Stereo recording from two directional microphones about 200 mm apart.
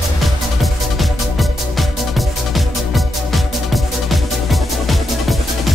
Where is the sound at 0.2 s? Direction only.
Centre (ahead or behind).